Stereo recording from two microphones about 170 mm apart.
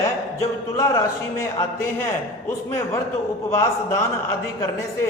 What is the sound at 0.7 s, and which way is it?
Speech, 15° left (ahead or behind).